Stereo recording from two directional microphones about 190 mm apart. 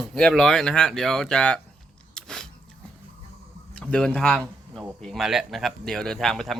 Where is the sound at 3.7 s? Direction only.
5° left (ahead or behind).